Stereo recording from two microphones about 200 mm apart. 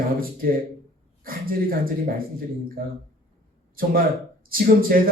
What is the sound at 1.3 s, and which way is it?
Speech, 45° right (ahead or behind).